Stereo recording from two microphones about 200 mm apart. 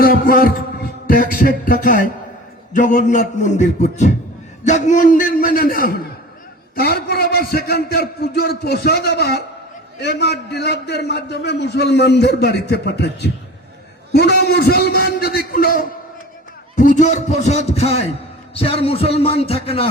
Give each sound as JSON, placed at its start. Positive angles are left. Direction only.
{"t": 0.0, "sound": "music", "side_deg": 45}
{"t": 1.0, "sound": "a man's voice", "side_deg": 45}